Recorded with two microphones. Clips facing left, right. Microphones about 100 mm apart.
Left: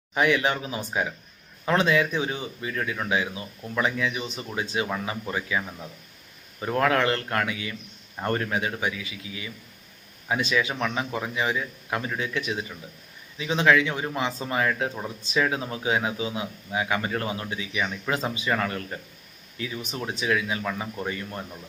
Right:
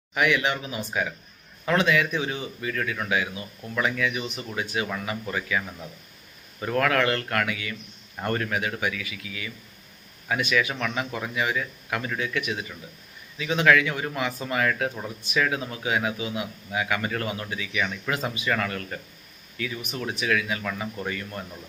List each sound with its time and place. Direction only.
0.1 s a man's voice: 30° left (ahead or behind)